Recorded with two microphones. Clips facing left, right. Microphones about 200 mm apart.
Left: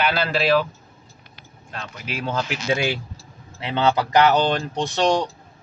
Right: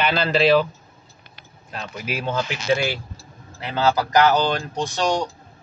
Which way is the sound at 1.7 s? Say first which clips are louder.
Right 3 dB; 5° right (ahead or behind).